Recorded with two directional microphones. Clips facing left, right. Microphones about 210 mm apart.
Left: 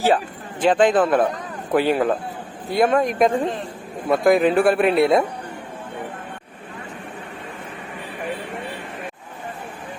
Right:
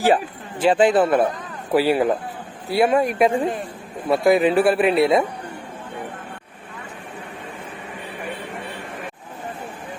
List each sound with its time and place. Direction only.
0.6 s speech: 10° right (ahead or behind)